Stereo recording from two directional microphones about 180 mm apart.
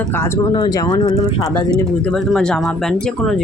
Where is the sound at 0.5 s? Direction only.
20° left (ahead or behind).